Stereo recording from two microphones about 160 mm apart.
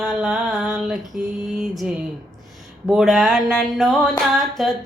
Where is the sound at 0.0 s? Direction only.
5° right (ahead or behind).